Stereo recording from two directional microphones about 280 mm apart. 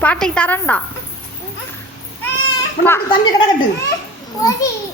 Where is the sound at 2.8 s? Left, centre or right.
Centre.